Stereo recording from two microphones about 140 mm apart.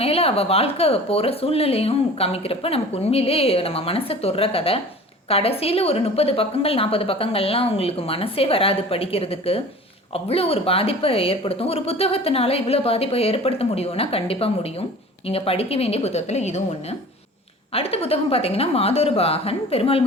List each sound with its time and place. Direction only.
0.0 s speech: 45° left (ahead or behind)
17.7 s speech: 45° left (ahead or behind)